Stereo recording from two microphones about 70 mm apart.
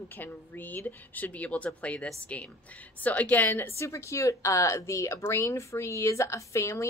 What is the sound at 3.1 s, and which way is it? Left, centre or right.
A woman's voice, left.